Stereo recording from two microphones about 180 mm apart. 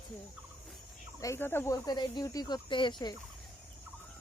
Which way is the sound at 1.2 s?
15° left (ahead or behind).